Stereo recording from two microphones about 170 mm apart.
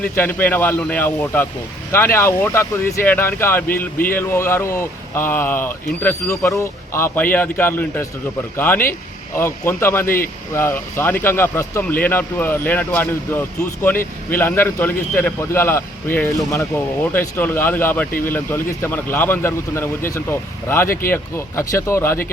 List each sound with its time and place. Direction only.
0.0 s a man's voice: 10° left (ahead or behind)